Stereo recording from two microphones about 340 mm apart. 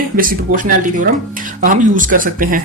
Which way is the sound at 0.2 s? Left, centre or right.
Right.